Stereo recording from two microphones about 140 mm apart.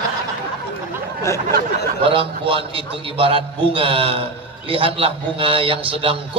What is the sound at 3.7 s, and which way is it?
A man's voice, 40° right (ahead or behind).